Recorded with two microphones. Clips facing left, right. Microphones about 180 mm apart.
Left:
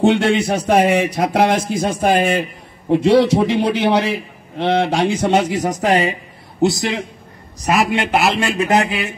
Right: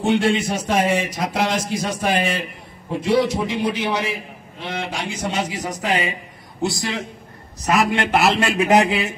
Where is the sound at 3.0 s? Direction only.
70° left (ahead or behind); by 6.1 s 40° left (ahead or behind).